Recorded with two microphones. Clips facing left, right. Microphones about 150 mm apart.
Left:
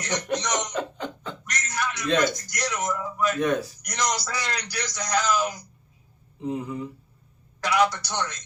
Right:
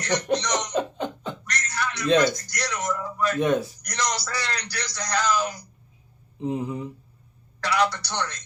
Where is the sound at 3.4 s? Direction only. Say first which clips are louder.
Right 3 dB; 25° right (ahead or behind).